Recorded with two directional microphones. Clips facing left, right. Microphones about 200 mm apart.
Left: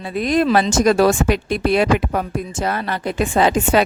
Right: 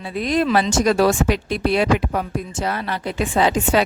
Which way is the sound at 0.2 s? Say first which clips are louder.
Left 2 dB; 50° left (ahead or behind).